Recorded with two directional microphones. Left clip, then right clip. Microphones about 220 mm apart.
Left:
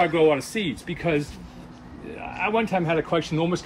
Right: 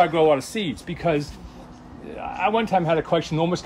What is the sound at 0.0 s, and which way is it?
Speech, 40° right (ahead or behind).